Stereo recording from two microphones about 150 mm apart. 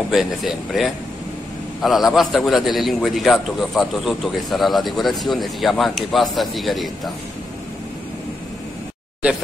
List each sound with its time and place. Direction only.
0.1 s a man's voice: 5° right (ahead or behind)